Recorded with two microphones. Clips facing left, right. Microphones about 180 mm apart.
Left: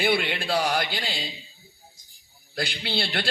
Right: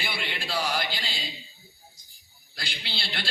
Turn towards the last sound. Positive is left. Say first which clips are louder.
# left 8 dB
turn(degrees=55)  # may be behind; listen again after turning